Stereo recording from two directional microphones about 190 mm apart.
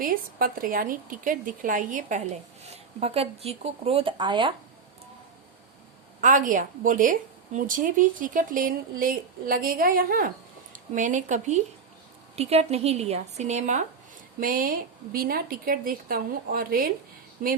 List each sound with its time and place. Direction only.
0.0 s a woman's voice: 50° right (ahead or behind); by 4.5 s 25° right (ahead or behind)
6.2 s a woman's voice: 45° right (ahead or behind)